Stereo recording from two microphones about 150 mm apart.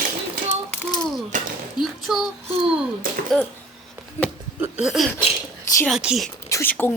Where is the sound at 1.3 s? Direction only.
60° right (ahead or behind).